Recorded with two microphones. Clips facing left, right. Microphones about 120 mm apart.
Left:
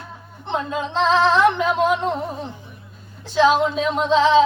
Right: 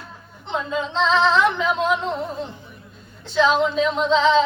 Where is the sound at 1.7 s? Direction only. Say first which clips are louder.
Left 2 dB; 10° left (ahead or behind).